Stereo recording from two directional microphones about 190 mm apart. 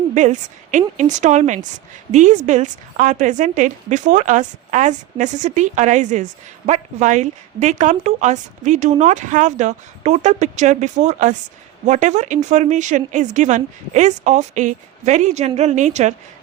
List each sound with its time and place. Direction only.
0.1 s speech: 40° right (ahead or behind)